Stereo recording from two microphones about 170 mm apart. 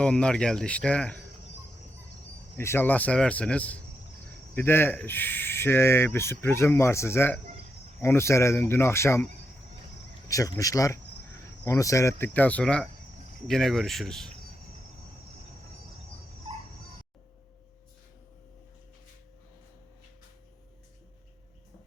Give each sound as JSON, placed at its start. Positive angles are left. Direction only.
{"t": 0.0, "sound": "speech", "side_deg": 5}
{"t": 2.6, "sound": "speech", "side_deg": 15}
{"t": 10.2, "sound": "speech", "side_deg": 20}